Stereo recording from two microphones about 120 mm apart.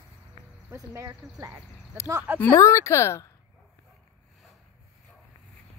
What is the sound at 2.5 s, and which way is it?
Speech, 25° left (ahead or behind).